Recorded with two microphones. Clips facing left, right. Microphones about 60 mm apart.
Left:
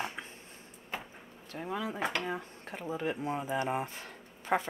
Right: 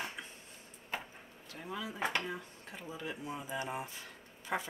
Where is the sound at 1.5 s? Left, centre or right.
Left.